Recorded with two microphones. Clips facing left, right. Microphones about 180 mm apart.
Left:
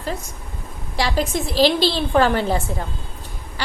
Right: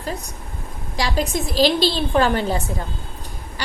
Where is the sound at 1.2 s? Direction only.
15° right (ahead or behind).